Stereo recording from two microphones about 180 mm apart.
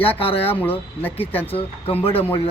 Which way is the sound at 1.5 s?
35° left (ahead or behind).